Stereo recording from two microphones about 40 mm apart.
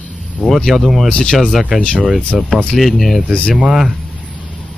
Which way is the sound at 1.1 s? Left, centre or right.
Left.